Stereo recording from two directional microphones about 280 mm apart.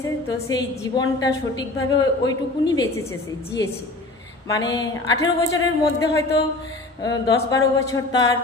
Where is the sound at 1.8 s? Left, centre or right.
Left.